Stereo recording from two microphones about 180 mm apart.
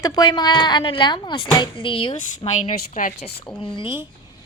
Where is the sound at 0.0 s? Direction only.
25° left (ahead or behind); by 3.1 s 40° left (ahead or behind).